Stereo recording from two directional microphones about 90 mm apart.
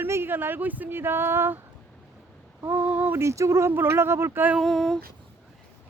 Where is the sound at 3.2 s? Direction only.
30° right (ahead or behind).